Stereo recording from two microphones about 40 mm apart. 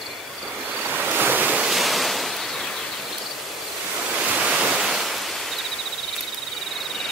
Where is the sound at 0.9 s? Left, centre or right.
Right.